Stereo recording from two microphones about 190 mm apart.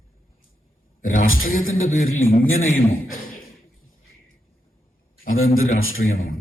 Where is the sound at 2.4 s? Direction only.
90° left.